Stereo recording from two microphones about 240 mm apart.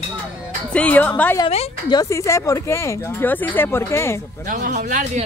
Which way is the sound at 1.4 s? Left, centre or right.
Left.